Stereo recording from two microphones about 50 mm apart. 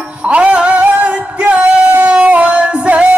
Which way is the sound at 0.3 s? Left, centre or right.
Right.